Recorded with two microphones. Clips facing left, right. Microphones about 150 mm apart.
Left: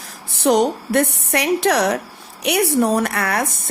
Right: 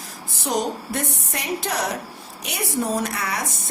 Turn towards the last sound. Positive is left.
turn(degrees=55)  # may be behind; listen again after turning